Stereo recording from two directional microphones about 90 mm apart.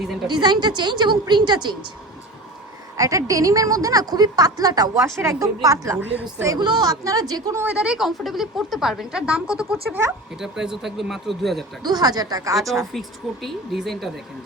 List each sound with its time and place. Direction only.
0.3 s a woman's voice: 55° right (ahead or behind)
3.0 s a woman's voice: 40° right (ahead or behind)
5.2 s a woman's voice: 35° right (ahead or behind)
6.6 s a woman's voice: 55° right (ahead or behind)
6.9 s a woman's voice: 40° right (ahead or behind)
7.7 s speech: 10° right (ahead or behind)
9.9 s speech: 20° right (ahead or behind)
10.4 s speech: 5° right (ahead or behind)
11.8 s a woman's voice: 50° right (ahead or behind)
12.9 s speech: centre (ahead or behind)